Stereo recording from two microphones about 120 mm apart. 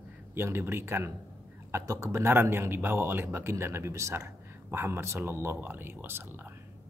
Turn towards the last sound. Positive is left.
turn(degrees=-20)  # may be behind; listen again after turning